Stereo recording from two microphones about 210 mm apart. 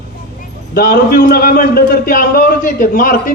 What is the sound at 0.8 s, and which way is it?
A man's voice, 45° left (ahead or behind).